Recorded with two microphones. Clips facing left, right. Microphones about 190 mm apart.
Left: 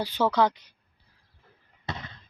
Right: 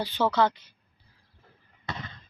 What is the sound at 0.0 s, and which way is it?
Speech, 10° left (ahead or behind).